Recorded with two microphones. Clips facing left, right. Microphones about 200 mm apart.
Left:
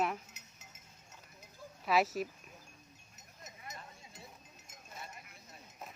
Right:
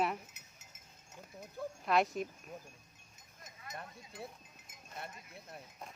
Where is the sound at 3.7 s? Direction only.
60° right (ahead or behind).